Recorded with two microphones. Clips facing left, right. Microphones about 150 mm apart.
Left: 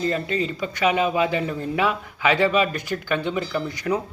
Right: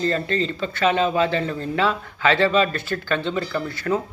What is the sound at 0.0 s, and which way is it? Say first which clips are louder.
Speech: right 1 dB; 10° left (ahead or behind).